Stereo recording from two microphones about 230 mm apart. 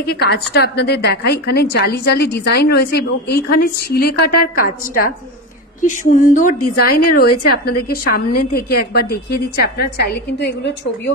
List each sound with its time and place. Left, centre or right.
0.0 s a woman's voice: left